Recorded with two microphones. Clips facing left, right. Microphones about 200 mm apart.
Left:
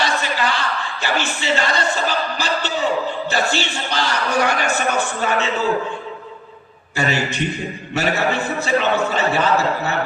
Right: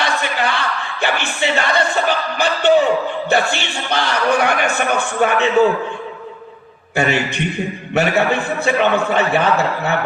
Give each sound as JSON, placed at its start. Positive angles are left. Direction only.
{"t": 0.0, "sound": "a sound", "side_deg": -60}
{"t": 1.0, "sound": "a man's voice", "side_deg": -60}
{"t": 6.9, "sound": "a man's voice", "side_deg": -60}